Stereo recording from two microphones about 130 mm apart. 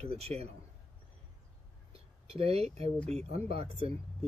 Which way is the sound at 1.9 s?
50° right (ahead or behind).